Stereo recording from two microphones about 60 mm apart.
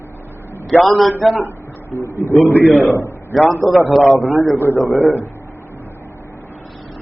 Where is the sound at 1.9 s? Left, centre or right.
Left.